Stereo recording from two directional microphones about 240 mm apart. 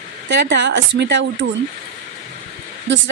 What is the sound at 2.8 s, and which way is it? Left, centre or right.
Speech, right.